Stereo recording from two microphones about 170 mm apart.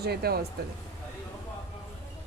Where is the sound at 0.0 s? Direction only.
70° right (ahead or behind).